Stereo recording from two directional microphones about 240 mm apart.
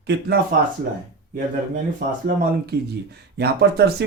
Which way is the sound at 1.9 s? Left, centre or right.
Right.